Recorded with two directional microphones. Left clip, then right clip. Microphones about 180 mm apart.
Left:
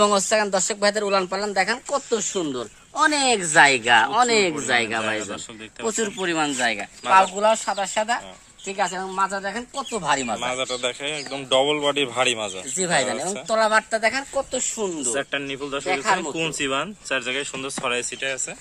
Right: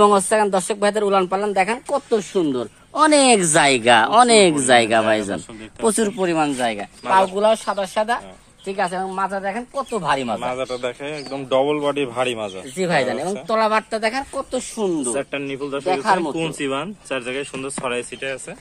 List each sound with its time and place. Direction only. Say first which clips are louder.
0.0 s speech: right 4 dB; 25° right (ahead or behind)
2.9 s speech: right 5 dB; 60° right (ahead or behind); by 5.2 s 80° right
5.9 s speech: right 6 dB; 55° right (ahead or behind)
6.2 s speech: right 1 dB; 25° right (ahead or behind)
7.1 s speech: right 1 dB; 45° right (ahead or behind)
8.6 s speech: right 3 dB; 35° right (ahead or behind); by 10.1 s 15° right (ahead or behind)
10.1 s speech: right 2 dB; 25° right (ahead or behind)
10.4 s a man's voice: right 1 dB; centre (ahead or behind)
12.7 s speech: right 3 dB; 25° right (ahead or behind); by 15.0 s 45° right (ahead or behind)
15.1 s a man's voice: right 1 dB; centre (ahead or behind)
15.9 s speech: right 3 dB; 45° right (ahead or behind)
16.3 s a man's voice: right 1 dB; centre (ahead or behind)